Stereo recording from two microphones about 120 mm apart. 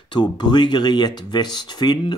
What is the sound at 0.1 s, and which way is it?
Speech, 40° left (ahead or behind).